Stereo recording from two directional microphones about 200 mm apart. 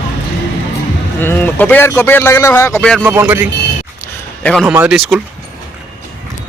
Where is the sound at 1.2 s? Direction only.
10° left (ahead or behind).